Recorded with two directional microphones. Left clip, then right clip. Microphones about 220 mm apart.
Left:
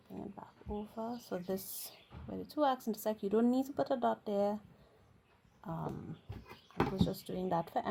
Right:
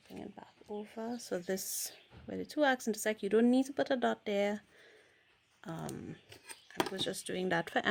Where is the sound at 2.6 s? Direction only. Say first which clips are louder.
Right 2 dB; 25° right (ahead or behind).